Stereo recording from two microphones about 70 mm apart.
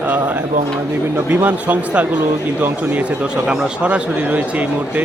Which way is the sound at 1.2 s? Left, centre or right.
Right.